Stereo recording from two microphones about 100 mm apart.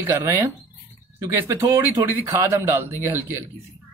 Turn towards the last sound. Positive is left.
turn(degrees=-25)  # may be behind; listen again after turning